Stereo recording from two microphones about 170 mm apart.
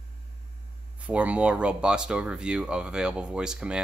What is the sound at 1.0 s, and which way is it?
Speech, 10° right (ahead or behind).